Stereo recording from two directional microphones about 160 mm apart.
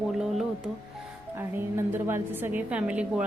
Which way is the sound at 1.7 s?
15° right (ahead or behind).